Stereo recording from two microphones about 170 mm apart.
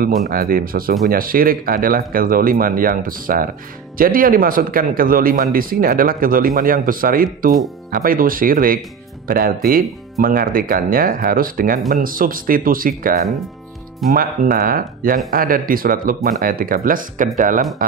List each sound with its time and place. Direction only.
0.3 s a man's voice: 60° right (ahead or behind)